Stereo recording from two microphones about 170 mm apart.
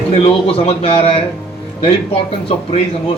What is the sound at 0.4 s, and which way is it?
Speech, 35° left (ahead or behind).